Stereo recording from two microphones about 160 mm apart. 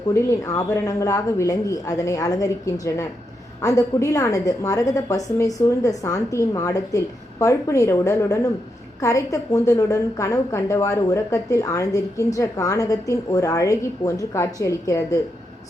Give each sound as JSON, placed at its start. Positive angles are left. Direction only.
{"t": 0.1, "sound": "a woman's voice", "side_deg": 20}